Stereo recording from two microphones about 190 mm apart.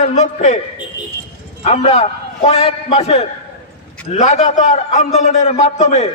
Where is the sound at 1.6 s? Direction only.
35° left (ahead or behind).